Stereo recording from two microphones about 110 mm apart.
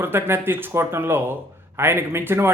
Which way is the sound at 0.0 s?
20° right (ahead or behind).